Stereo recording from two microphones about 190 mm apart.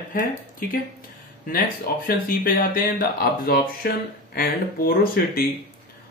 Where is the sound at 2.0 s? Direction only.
50° left (ahead or behind).